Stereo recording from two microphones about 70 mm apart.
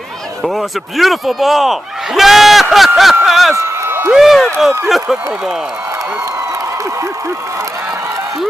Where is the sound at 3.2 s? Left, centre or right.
Centre.